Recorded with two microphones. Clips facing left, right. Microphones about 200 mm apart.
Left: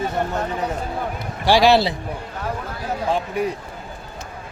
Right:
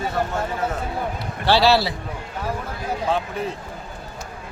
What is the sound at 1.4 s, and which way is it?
Speech, 15° left (ahead or behind).